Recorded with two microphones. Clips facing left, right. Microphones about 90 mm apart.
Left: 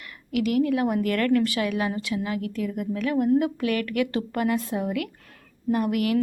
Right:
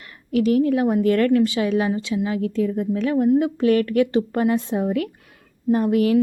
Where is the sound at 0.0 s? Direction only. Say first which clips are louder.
Right 5 dB; 30° right (ahead or behind).